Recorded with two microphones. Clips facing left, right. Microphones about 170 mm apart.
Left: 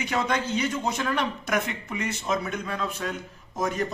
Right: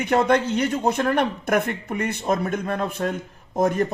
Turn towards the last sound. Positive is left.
turn(degrees=-55)  # may be behind; listen again after turning